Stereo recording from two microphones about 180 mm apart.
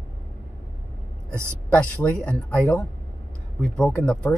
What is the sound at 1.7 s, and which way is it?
Speech, 5° left (ahead or behind).